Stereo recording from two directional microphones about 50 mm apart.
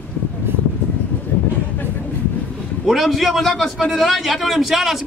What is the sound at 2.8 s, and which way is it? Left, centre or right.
A man's voice, centre.